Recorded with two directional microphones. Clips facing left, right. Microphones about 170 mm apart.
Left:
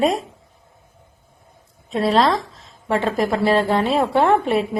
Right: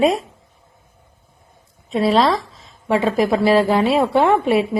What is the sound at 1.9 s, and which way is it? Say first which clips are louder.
A woman's voice: right 1 dB; centre (ahead or behind).